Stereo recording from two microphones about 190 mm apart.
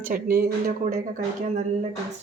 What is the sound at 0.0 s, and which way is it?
Speech, 50° right (ahead or behind).